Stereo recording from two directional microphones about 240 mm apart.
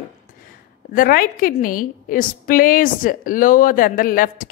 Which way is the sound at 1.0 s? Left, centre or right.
Left.